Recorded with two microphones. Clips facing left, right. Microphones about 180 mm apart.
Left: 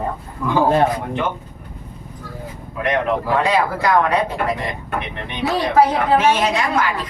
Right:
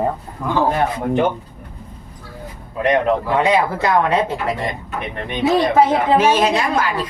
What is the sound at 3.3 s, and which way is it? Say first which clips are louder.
Speech: even; 20° right (ahead or behind).